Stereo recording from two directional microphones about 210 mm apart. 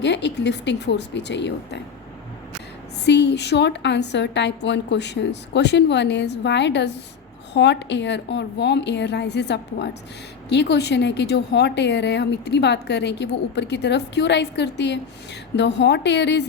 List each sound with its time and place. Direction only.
0.0 s a woman's voice: 55° left (ahead or behind)
3.0 s a woman's voice: 55° left (ahead or behind)